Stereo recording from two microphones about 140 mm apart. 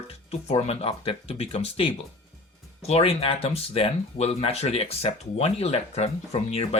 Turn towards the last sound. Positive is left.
turn(degrees=45)  # may be behind; listen again after turning